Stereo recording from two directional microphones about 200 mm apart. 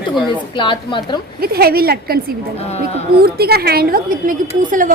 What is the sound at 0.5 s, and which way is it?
Speech, 25° left (ahead or behind).